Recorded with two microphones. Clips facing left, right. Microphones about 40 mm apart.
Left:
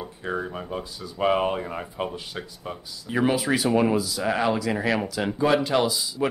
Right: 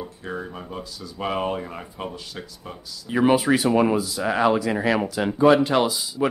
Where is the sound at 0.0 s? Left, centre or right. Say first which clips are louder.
Left 2 dB; centre.